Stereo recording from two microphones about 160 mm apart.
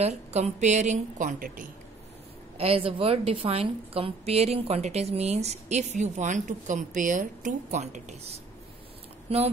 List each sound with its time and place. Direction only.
0.0 s a woman's voice: 45° right (ahead or behind)
2.5 s a woman's voice: 35° right (ahead or behind)